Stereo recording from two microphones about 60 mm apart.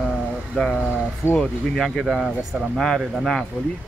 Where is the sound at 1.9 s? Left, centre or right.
Centre.